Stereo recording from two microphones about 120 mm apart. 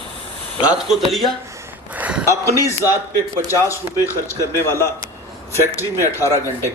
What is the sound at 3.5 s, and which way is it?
A man's voice, 25° left (ahead or behind).